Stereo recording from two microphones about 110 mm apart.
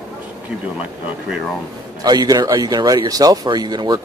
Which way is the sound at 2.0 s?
35° right (ahead or behind).